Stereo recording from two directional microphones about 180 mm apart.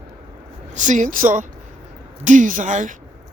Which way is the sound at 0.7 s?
45° right (ahead or behind).